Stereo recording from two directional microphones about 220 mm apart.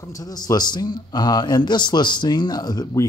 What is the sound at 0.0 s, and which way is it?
Speech, 15° left (ahead or behind).